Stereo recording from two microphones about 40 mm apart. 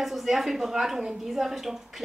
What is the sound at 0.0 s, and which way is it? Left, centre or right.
A woman's voice, centre.